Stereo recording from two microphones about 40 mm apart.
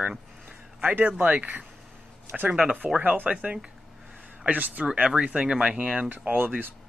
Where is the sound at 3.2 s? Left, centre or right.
Right.